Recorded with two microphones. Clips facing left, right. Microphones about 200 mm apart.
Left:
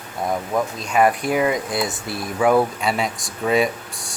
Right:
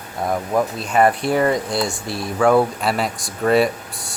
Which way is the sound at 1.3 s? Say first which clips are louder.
Right 2 dB; 10° left (ahead or behind).